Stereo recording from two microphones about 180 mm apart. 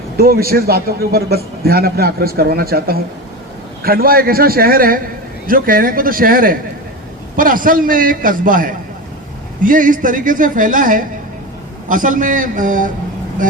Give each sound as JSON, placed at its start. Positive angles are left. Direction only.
{"t": 0.2, "sound": "a man's voice", "side_deg": -55}